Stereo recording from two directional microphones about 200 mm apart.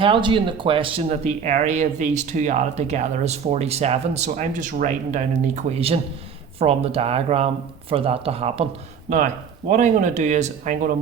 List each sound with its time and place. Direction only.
0.0 s speech: 25° right (ahead or behind)